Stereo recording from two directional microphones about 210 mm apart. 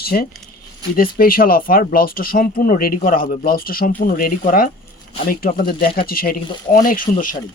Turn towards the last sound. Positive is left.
turn(degrees=40)  # may be behind; listen again after turning